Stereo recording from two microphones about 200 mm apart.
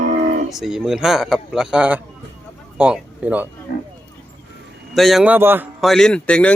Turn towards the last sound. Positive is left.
turn(degrees=5)  # may be behind; listen again after turning